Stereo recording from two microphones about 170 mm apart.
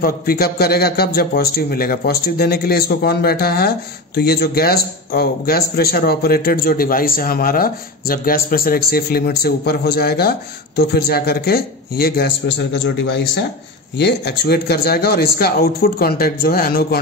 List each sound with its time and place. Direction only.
0.0 s a man's voice: 60° left (ahead or behind); by 13.4 s 85° left
13.9 s a man's voice: 75° left (ahead or behind)